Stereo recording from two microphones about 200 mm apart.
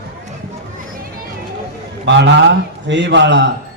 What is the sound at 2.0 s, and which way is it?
A man's voice, 60° right (ahead or behind).